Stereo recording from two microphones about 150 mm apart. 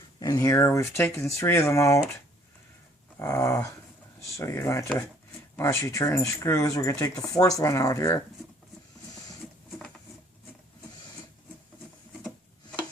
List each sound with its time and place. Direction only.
0.2 s speech: 25° left (ahead or behind)
3.2 s speech: 20° left (ahead or behind)